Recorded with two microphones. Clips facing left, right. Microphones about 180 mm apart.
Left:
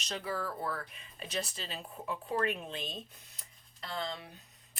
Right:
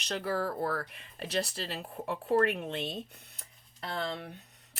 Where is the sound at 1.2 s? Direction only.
70° right (ahead or behind).